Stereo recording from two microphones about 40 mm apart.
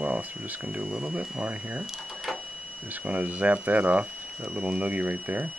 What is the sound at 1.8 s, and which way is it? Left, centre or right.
Speech, centre.